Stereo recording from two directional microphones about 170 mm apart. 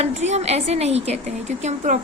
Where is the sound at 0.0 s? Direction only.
40° right (ahead or behind).